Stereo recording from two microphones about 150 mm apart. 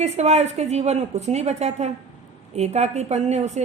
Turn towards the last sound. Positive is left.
turn(degrees=-50)  # may be behind; listen again after turning